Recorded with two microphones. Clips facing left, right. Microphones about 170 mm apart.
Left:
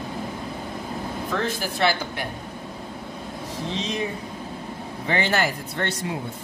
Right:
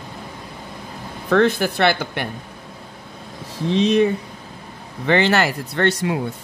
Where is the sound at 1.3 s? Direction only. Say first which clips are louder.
Right 12 dB; 65° right (ahead or behind).